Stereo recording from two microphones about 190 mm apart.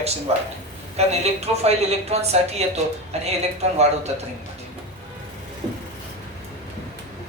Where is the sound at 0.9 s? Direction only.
35° right (ahead or behind).